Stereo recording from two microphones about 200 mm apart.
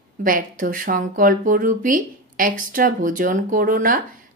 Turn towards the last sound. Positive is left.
turn(degrees=-45)  # may be behind; listen again after turning